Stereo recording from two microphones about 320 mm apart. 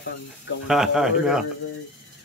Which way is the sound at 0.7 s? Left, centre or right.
Centre.